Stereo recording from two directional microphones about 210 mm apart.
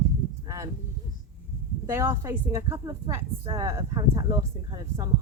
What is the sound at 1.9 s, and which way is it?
A woman's voice, 10° right (ahead or behind).